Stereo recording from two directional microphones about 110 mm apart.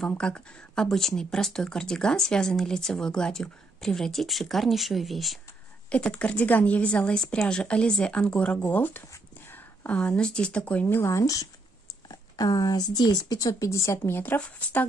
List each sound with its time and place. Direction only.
0.1 s speech: 10° left (ahead or behind)
5.9 s a woman's voice: 10° left (ahead or behind); by 11.4 s 30° left (ahead or behind)
12.1 s a sound: 35° left (ahead or behind)
12.9 s speech: 35° left (ahead or behind); by 14.9 s 15° left (ahead or behind)